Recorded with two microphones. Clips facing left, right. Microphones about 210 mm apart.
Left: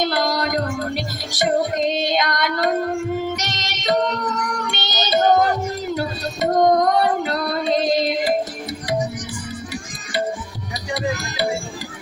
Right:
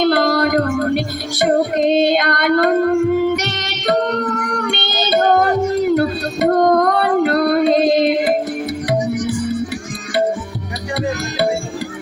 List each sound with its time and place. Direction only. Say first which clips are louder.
0.0 s music: right 7 dB; 60° right (ahead or behind)
5.9 s singing: right 8 dB; 60° right (ahead or behind)